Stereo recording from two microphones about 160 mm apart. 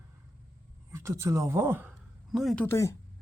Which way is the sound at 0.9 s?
20° right (ahead or behind).